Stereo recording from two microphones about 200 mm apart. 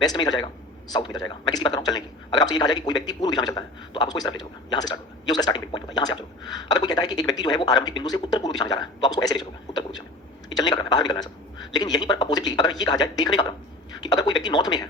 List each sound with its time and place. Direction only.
0.0 s a man's voice: 20° left (ahead or behind)